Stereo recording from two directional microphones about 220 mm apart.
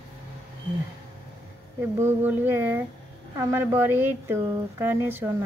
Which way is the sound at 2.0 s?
10° right (ahead or behind).